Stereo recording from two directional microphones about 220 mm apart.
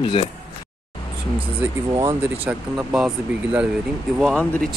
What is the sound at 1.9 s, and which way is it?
Speech, 15° right (ahead or behind).